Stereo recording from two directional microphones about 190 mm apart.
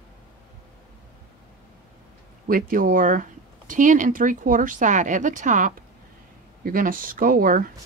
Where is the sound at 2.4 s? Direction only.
50° right (ahead or behind).